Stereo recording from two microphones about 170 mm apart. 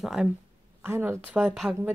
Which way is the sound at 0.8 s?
15° right (ahead or behind).